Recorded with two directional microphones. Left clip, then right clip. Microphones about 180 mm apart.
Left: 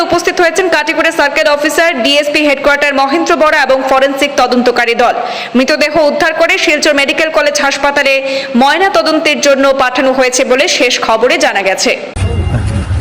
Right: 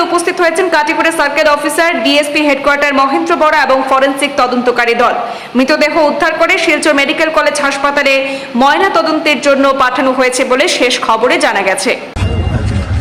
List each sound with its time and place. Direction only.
0.0 s a woman's voice: 20° left (ahead or behind)